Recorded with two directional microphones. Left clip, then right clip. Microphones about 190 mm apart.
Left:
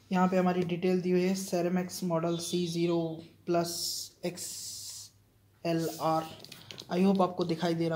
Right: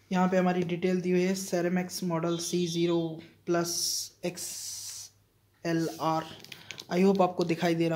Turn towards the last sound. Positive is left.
turn(degrees=-35)  # may be behind; listen again after turning